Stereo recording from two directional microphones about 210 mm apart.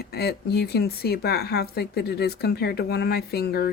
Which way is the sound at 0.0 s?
50° left (ahead or behind).